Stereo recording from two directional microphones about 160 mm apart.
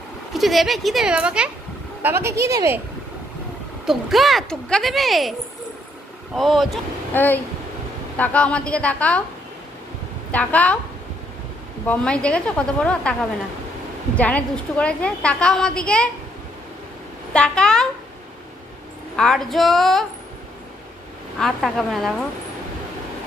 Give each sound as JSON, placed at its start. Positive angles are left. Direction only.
{"t": 0.3, "sound": "speech", "side_deg": 0}
{"t": 3.8, "sound": "speech", "side_deg": 0}
{"t": 6.3, "sound": "speech", "side_deg": 0}
{"t": 7.1, "sound": "a woman's voice", "side_deg": 10}
{"t": 10.3, "sound": "a woman's voice", "side_deg": 10}
{"t": 11.9, "sound": "a woman's voice", "side_deg": 5}
{"t": 14.1, "sound": "a woman's voice", "side_deg": 10}
{"t": 17.3, "sound": "speech", "side_deg": 5}
{"t": 19.1, "sound": "speech", "side_deg": 0}
{"t": 21.4, "sound": "speech", "side_deg": 0}